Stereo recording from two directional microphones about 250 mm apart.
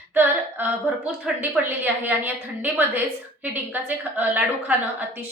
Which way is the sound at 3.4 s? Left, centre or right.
Centre.